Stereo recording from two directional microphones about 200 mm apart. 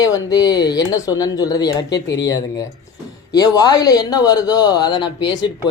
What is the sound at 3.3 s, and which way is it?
Speech, 20° left (ahead or behind).